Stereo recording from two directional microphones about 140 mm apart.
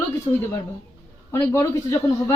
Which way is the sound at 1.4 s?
20° left (ahead or behind).